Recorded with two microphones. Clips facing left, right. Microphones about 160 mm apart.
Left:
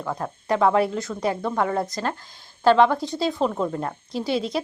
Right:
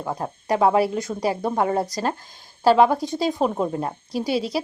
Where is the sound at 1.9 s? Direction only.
10° right (ahead or behind).